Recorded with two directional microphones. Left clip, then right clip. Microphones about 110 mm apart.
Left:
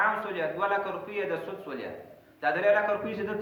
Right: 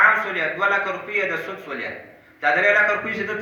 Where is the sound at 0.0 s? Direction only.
25° left (ahead or behind).